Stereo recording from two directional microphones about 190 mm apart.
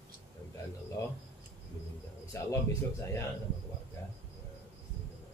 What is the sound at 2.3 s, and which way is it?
Speech, 15° left (ahead or behind).